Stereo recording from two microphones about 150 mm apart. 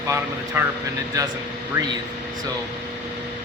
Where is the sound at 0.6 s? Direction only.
15° right (ahead or behind).